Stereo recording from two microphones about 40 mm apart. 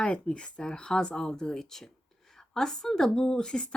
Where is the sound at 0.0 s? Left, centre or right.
Left.